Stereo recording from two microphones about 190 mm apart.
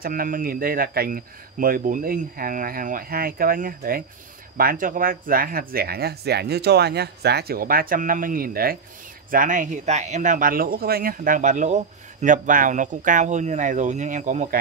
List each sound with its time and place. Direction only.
0.0 s speech: 50° right (ahead or behind)